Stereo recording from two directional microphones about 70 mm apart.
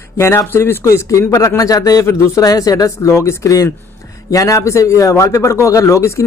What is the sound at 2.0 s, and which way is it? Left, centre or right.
Speech, left.